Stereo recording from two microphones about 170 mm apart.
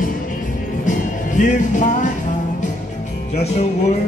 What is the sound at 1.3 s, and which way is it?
Music, 45° left (ahead or behind).